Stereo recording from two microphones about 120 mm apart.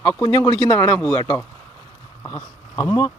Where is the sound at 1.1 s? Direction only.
30° left (ahead or behind).